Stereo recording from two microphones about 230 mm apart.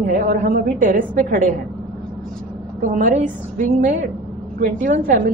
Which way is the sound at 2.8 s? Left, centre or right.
Right.